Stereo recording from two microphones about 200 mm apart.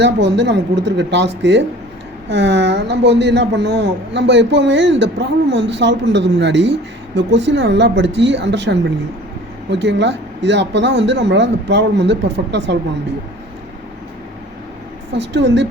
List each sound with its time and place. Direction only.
0.0 s a man's voice: 60° right (ahead or behind)
15.1 s a man's voice: 60° right (ahead or behind)